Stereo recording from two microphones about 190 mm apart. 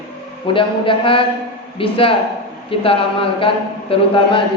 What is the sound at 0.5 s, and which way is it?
A man's voice, 25° left (ahead or behind).